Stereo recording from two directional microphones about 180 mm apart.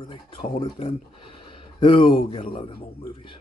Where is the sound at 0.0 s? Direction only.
25° left (ahead or behind).